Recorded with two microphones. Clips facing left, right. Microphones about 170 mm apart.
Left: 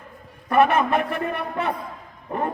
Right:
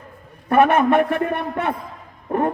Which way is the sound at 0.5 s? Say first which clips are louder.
Right 4 dB; 50° right (ahead or behind).